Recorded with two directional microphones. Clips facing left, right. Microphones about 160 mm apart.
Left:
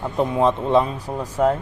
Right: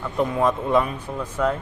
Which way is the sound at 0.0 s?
25° left (ahead or behind).